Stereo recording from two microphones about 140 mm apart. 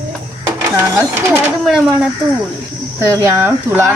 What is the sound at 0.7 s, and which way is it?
Speech, 15° right (ahead or behind).